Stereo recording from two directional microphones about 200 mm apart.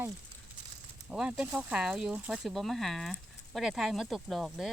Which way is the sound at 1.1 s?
5° right (ahead or behind).